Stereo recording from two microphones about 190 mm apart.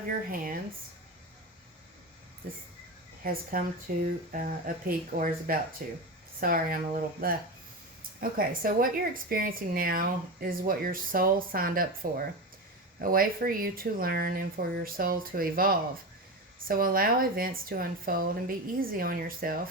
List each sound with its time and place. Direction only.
3.5 s a woman's voice: 45° right (ahead or behind)